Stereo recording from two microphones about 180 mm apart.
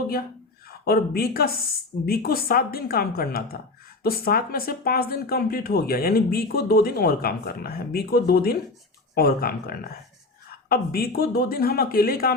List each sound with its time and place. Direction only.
0.9 s speech: 55° left (ahead or behind)